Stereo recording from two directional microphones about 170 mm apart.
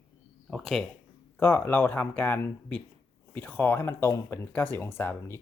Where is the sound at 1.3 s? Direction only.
15° left (ahead or behind).